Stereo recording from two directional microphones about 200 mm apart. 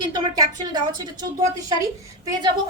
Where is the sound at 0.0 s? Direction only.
20° right (ahead or behind).